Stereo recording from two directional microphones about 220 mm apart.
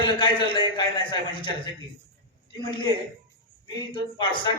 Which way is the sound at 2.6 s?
20° left (ahead or behind).